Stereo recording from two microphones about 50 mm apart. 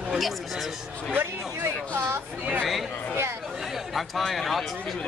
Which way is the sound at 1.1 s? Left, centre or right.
Right.